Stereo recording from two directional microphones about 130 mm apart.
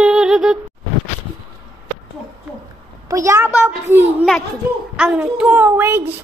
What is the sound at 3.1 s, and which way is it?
A child's voice, 25° right (ahead or behind).